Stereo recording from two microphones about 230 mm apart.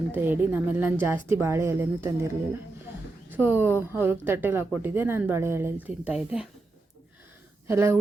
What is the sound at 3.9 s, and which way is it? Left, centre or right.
Speech, centre.